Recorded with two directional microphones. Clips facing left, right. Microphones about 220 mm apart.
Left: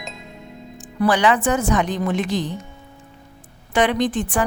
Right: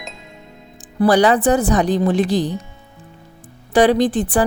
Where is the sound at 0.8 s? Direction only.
35° right (ahead or behind).